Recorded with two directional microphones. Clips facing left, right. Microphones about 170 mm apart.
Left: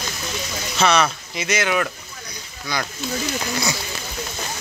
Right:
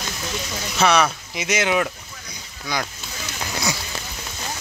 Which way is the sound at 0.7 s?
10° right (ahead or behind).